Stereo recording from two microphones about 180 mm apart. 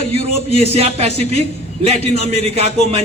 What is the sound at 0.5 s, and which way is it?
A man's voice, 35° right (ahead or behind).